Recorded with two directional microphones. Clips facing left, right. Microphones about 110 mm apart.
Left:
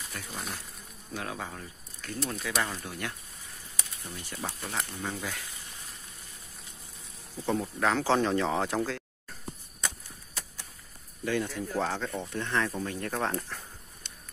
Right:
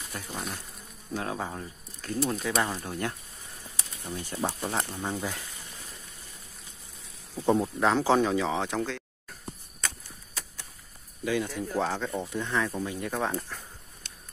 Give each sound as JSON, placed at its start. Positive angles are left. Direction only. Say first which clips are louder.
{"t": 0.3, "sound": "speech", "louder": "right 3 dB", "side_deg": 0}
{"t": 1.1, "sound": "speech", "louder": "right 4 dB", "side_deg": -30}
{"t": 7.5, "sound": "speech", "louder": "right 2 dB", "side_deg": -20}
{"t": 8.2, "sound": "speech", "louder": "right 1 dB", "side_deg": -5}
{"t": 11.2, "sound": "speech", "louder": "right 1 dB", "side_deg": -5}